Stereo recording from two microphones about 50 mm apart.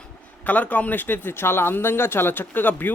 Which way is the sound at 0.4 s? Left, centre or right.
Left.